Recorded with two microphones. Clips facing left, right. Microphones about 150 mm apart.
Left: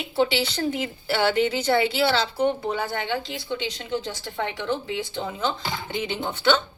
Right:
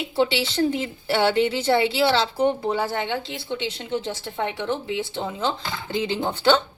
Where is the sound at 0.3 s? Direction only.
25° right (ahead or behind).